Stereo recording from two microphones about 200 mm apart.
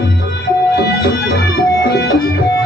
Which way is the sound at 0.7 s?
55° left (ahead or behind).